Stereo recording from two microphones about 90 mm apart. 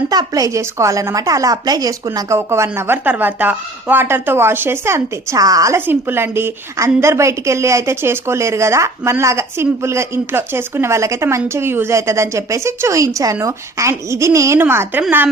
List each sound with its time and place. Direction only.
0.1 s a woman's voice: 45° right (ahead or behind)
2.3 s speech: 30° right (ahead or behind)
5.7 s a woman's voice: 25° right (ahead or behind)